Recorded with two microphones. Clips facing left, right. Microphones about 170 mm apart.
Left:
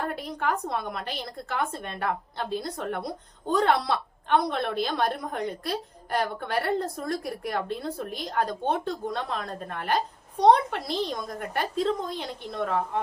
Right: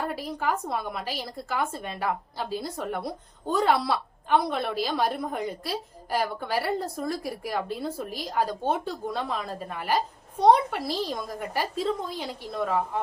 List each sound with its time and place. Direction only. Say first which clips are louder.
0.0 s a woman's voice: even; 5° right (ahead or behind)